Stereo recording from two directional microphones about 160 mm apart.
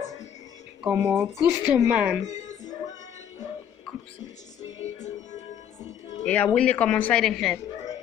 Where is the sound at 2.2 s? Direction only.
50° left (ahead or behind).